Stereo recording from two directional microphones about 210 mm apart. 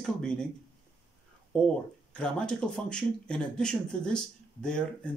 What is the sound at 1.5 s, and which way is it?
Speech, 5° left (ahead or behind).